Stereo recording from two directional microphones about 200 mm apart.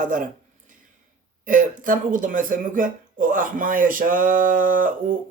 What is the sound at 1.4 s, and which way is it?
Speech, 40° right (ahead or behind).